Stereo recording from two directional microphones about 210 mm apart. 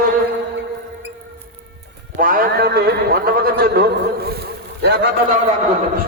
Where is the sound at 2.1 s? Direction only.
40° right (ahead or behind).